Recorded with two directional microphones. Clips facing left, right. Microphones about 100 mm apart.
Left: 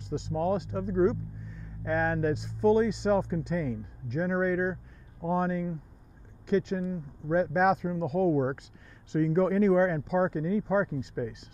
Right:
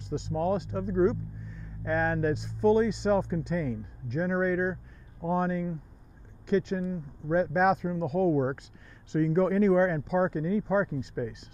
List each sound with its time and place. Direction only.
0.3 s speech: 10° left (ahead or behind)